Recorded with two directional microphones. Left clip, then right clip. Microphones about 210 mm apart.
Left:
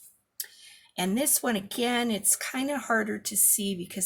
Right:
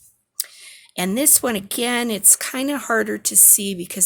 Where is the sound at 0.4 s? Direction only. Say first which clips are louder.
Right 9 dB; 50° right (ahead or behind).